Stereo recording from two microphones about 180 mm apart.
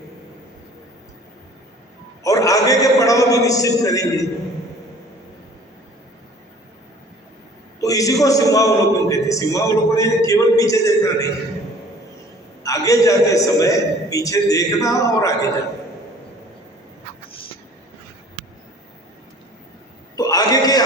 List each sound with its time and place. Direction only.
2.2 s a man's voice: 20° left (ahead or behind)
7.8 s a man's voice: 20° left (ahead or behind)
12.6 s a man's voice: 20° left (ahead or behind)
20.1 s a sound: 20° left (ahead or behind)